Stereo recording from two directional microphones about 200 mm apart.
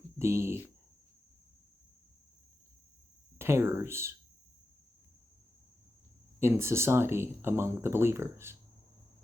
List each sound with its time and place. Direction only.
0.2 s speech: 15° right (ahead or behind)
3.3 s a sound: 15° right (ahead or behind)
6.4 s speech: 15° right (ahead or behind)